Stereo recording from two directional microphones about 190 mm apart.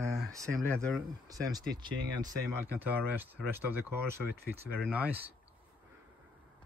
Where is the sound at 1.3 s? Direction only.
20° right (ahead or behind).